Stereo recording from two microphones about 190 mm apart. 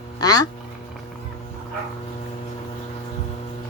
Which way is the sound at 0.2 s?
20° left (ahead or behind).